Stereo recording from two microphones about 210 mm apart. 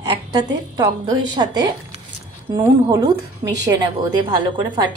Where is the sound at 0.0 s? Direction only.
20° right (ahead or behind).